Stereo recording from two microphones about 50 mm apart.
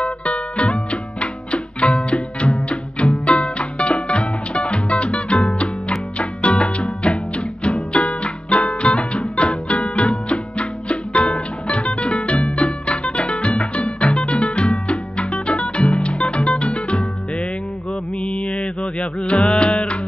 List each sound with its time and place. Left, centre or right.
0.0 s music: left